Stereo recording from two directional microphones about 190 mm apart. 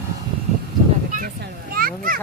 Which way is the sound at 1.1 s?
50° right (ahead or behind).